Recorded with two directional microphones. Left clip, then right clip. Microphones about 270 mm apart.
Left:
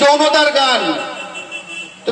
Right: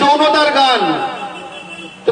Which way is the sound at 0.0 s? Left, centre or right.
Left.